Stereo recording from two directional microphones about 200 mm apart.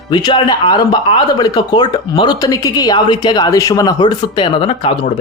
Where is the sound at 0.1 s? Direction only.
20° left (ahead or behind).